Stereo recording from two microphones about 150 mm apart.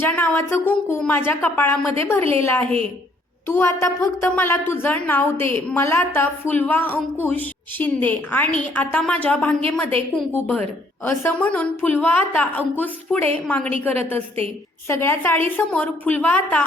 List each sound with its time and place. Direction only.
0.0 s a woman's voice: 15° left (ahead or behind)
14.8 s a woman's voice: 15° left (ahead or behind)